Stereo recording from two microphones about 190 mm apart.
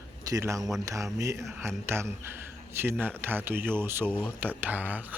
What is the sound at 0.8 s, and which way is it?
Speech, 15° right (ahead or behind).